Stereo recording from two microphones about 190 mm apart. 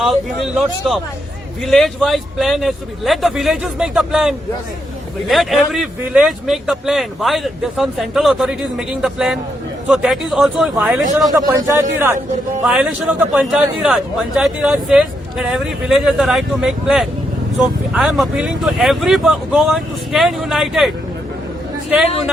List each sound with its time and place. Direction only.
0.0 s a man's voice: centre (ahead or behind)
11.3 s a man's voice: 20° right (ahead or behind)
12.6 s a man's voice: centre (ahead or behind)